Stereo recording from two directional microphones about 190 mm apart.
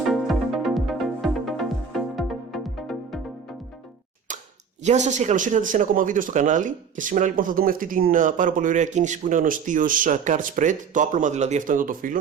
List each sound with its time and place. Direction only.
0.0 s music: centre (ahead or behind)
4.8 s speech: 40° right (ahead or behind)